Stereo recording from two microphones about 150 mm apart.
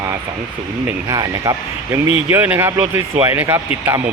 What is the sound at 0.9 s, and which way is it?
Speech, 25° right (ahead or behind).